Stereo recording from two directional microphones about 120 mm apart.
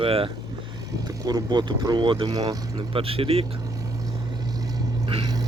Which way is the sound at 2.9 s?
50° right (ahead or behind).